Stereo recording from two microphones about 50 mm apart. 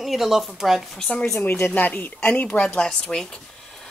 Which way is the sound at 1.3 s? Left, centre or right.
Left.